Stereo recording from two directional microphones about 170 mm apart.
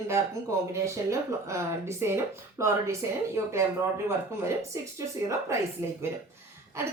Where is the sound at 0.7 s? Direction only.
15° right (ahead or behind).